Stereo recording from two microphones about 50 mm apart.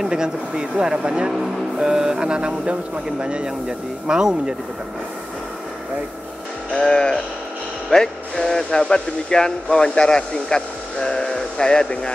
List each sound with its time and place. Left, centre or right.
0.0 s speech: centre
6.7 s speech: centre